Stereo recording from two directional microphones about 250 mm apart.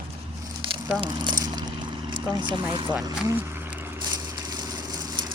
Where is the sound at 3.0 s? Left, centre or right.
Centre.